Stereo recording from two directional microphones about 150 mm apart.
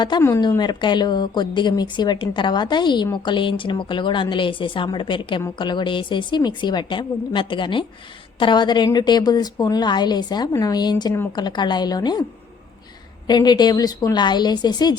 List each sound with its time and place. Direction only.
0.2 s a woman's voice: 20° left (ahead or behind)
13.2 s a woman's voice: 30° left (ahead or behind)